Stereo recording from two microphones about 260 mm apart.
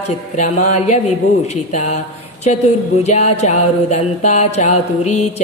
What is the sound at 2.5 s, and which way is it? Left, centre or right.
Music, left.